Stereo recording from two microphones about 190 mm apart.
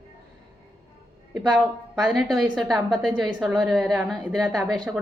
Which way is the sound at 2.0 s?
Centre (ahead or behind).